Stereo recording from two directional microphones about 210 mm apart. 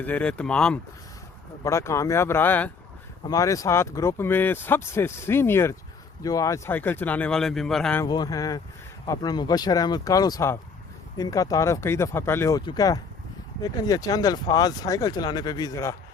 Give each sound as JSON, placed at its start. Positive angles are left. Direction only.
{"t": 0.0, "sound": "speech", "side_deg": 5}
{"t": 8.0, "sound": "speech", "side_deg": 20}